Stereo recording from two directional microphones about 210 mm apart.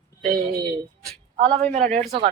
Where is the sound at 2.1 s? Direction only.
25° right (ahead or behind).